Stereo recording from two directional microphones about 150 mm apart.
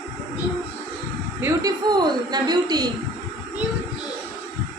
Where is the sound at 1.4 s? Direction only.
25° right (ahead or behind).